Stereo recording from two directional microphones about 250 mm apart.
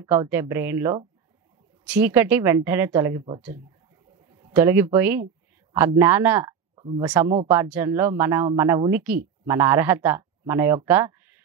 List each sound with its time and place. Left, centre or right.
0.0 s speech: centre
6.7 s a sound: centre
7.0 s speech: centre